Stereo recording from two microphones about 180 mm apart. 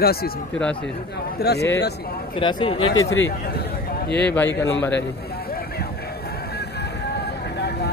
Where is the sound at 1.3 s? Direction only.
65° left (ahead or behind).